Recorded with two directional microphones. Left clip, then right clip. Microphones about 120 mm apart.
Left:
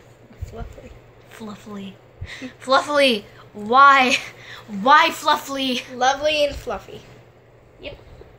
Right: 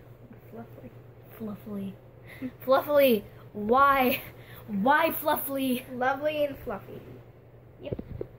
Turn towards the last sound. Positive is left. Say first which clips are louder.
# left 9 dB
turn(degrees=45)  # may be behind; listen again after turning